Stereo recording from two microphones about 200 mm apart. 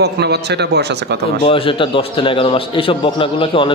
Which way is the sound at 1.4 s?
25° left (ahead or behind).